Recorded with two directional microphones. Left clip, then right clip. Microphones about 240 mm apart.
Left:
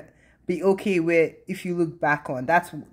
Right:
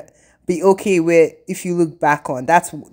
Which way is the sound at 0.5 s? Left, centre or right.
Right.